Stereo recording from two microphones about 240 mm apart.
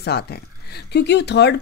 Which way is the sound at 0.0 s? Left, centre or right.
Left.